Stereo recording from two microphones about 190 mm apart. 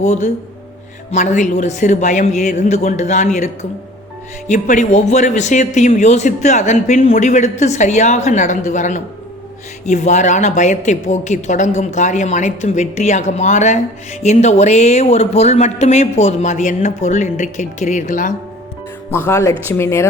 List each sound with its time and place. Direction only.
0.0 s speech: 35° left (ahead or behind)
19.1 s speech: 15° left (ahead or behind)